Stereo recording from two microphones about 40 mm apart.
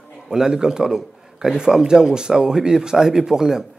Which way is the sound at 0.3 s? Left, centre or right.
Centre.